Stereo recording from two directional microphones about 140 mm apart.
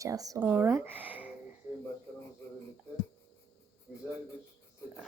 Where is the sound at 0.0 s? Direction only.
25° right (ahead or behind).